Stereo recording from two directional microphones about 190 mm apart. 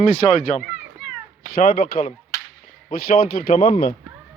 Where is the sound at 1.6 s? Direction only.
50° left (ahead or behind).